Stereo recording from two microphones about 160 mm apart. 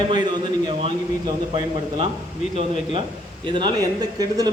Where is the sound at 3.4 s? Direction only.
30° right (ahead or behind).